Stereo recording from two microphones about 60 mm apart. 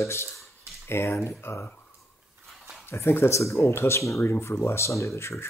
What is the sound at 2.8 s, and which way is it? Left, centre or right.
A man's voice, left.